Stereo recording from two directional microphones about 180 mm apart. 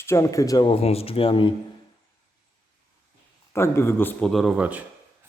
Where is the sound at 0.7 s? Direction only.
35° left (ahead or behind).